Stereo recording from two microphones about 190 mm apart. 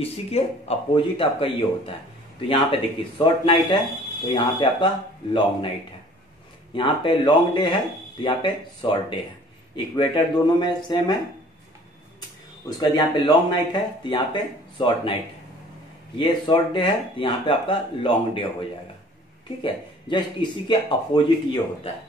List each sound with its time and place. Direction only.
0.0 s speech: 35° left (ahead or behind)
6.7 s speech: 25° left (ahead or behind)
9.9 s speech: 25° left (ahead or behind)
12.6 s speech: 20° left (ahead or behind)
16.2 s speech: 25° left (ahead or behind)